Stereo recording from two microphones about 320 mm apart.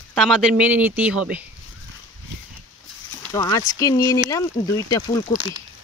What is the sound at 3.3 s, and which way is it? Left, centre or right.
Speech, centre.